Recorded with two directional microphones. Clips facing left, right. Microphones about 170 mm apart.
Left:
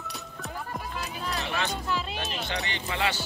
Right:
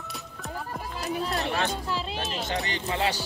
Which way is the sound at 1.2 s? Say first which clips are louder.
Right 1 dB; 35° right (ahead or behind).